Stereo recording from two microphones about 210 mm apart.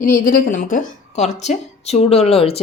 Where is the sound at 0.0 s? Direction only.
40° left (ahead or behind).